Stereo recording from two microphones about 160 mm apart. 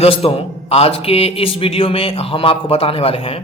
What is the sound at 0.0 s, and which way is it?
Speech, 35° left (ahead or behind).